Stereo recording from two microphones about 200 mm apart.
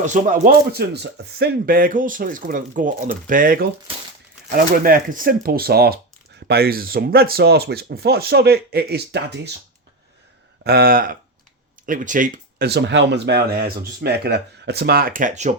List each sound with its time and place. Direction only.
0.0 s speech: 40° right (ahead or behind); by 9.6 s 55° right (ahead or behind)
10.6 s speech: 50° right (ahead or behind)